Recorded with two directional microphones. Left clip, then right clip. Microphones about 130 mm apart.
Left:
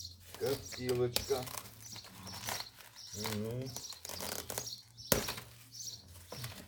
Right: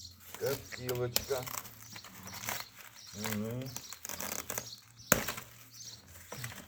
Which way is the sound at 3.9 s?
5° right (ahead or behind).